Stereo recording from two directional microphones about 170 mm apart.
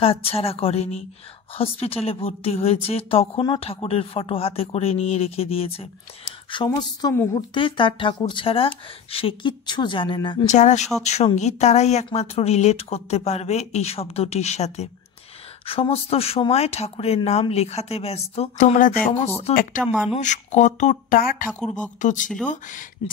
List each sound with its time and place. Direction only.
0.0 s a woman's voice: 35° left (ahead or behind)
10.4 s a woman's voice: 45° left (ahead or behind)
19.5 s speech: 55° left (ahead or behind)
19.8 s speech: centre (ahead or behind)
20.2 s speech: 45° left (ahead or behind)
21.5 s speech: 5° left (ahead or behind)
22.0 s speech: 50° left (ahead or behind)